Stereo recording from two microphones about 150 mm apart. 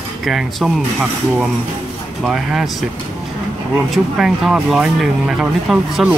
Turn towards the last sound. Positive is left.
turn(degrees=-5)  # may be behind; listen again after turning